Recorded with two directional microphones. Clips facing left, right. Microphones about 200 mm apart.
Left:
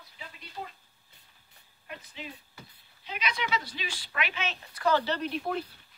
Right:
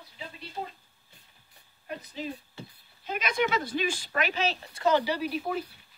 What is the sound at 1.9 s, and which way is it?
Speech, 40° right (ahead or behind).